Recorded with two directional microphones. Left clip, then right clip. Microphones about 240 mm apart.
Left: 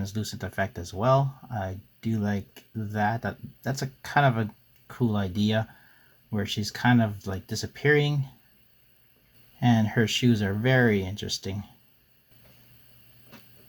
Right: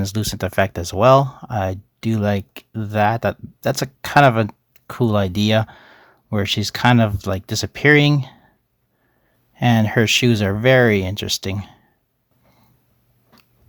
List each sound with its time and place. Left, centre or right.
0.0 s speech: right
9.6 s speech: right